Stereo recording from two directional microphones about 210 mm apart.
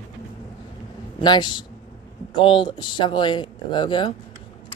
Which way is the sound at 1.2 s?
20° left (ahead or behind).